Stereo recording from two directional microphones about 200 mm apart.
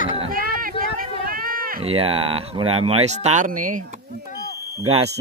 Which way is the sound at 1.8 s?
30° right (ahead or behind).